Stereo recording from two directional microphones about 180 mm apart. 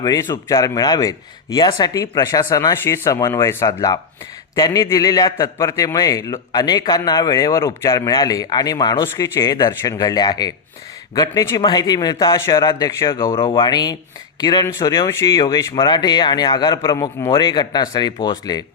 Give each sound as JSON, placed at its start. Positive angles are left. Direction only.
{"t": 0.0, "sound": "a man's voice", "side_deg": 20}